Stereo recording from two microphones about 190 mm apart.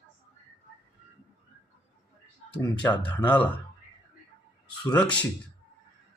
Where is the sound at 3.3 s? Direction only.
5° left (ahead or behind).